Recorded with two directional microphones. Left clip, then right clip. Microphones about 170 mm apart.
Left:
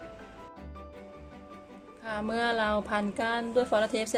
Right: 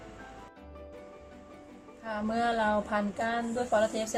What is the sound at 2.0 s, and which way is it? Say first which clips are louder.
Speech: even; 50° left (ahead or behind).